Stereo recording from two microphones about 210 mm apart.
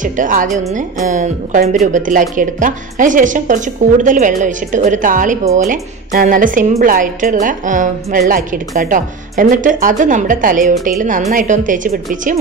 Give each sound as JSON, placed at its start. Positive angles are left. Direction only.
{"t": 0.0, "sound": "a woman's voice", "side_deg": -40}